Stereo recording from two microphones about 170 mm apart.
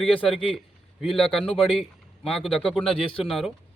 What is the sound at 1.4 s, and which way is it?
Speech, 35° left (ahead or behind).